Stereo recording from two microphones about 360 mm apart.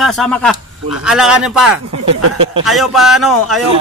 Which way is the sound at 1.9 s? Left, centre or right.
Right.